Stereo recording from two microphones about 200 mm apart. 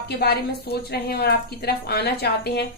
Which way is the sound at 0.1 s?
50° left (ahead or behind).